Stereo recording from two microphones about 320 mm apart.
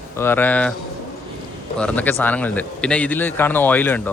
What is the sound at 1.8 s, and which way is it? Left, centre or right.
A man's voice, centre.